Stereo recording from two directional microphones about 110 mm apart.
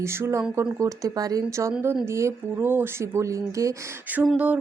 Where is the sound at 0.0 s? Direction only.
25° right (ahead or behind).